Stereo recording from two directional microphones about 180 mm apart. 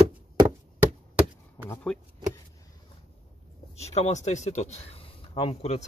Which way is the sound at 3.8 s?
40° left (ahead or behind).